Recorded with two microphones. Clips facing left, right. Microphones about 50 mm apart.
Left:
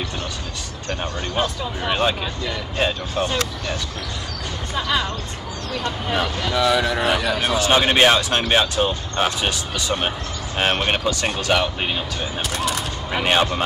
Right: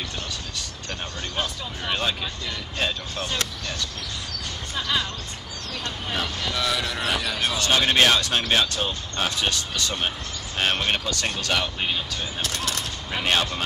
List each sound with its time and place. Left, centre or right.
0.8 s speech: centre
4.7 s speech: centre